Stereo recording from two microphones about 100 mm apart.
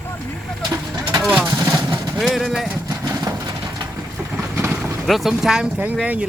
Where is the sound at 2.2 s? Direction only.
Centre (ahead or behind).